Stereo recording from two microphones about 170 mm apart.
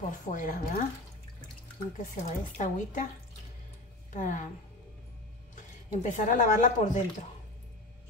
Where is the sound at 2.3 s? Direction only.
45° left (ahead or behind).